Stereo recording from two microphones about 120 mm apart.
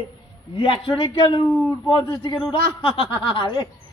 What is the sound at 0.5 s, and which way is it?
A man's voice, 50° left (ahead or behind).